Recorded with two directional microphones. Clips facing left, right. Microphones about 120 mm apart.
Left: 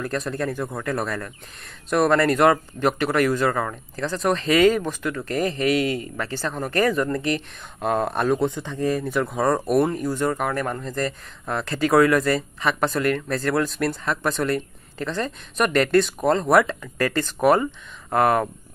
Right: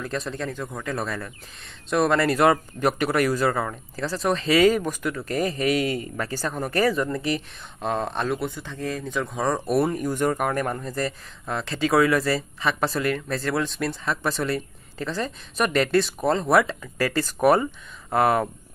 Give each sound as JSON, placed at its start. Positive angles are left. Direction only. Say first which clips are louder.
{"t": 0.0, "sound": "speech", "louder": "left 3 dB", "side_deg": 0}
{"t": 0.5, "sound": "speech", "louder": "left 4 dB", "side_deg": 15}
{"t": 5.2, "sound": "a man's voice", "louder": "left 2 dB", "side_deg": 40}
{"t": 6.4, "sound": "speech", "louder": "left 1 dB", "side_deg": -10}
{"t": 8.4, "sound": "speech", "louder": "left 6 dB", "side_deg": 20}
{"t": 17.5, "sound": "speech", "louder": "left 1 dB", "side_deg": -10}